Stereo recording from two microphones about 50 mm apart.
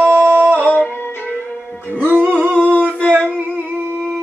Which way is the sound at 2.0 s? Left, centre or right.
Right.